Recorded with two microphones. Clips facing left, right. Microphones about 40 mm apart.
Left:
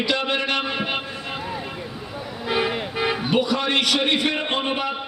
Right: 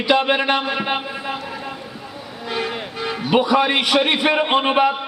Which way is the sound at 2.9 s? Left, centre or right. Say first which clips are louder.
Left 3 dB; centre.